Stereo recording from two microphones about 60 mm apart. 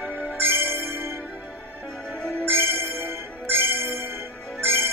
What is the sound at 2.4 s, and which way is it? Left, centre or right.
Music, right.